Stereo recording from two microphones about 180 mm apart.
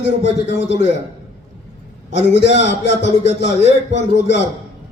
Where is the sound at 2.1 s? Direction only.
75° left (ahead or behind).